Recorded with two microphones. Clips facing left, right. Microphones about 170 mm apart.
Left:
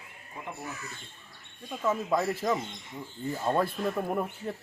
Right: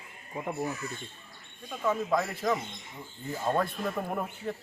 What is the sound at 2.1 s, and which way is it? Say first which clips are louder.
Speech: left 1 dB; 25° left (ahead or behind).